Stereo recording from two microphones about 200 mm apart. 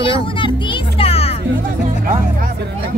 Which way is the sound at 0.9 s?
30° left (ahead or behind).